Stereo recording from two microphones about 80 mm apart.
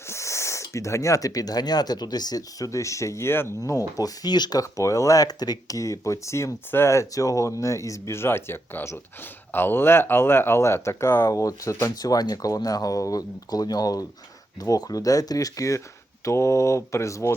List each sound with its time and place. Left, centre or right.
0.1 s speech: left
3.6 s speech: left
4.6 s speech: left
11.3 s speech: left